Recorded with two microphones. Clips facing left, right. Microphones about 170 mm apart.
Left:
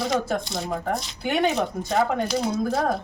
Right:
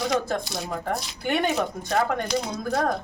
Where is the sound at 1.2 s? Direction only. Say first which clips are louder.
Left 2 dB; centre (ahead or behind).